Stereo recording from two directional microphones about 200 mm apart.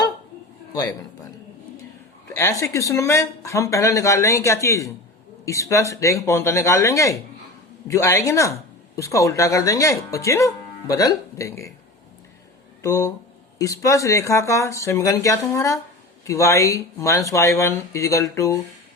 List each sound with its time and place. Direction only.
0.7 s a man's voice: 20° left (ahead or behind)
2.2 s speech: 15° left (ahead or behind)
12.8 s speech: 15° left (ahead or behind)